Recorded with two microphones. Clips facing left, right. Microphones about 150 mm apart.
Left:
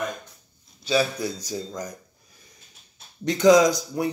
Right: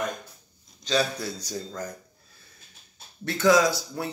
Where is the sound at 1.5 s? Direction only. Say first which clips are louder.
Left 2 dB; 15° left (ahead or behind).